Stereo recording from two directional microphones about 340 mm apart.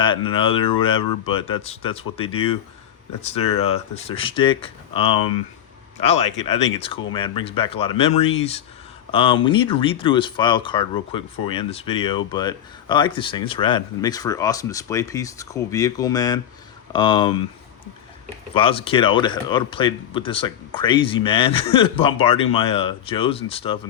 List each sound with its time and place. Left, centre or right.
0.0 s speech: centre
18.5 s speech: centre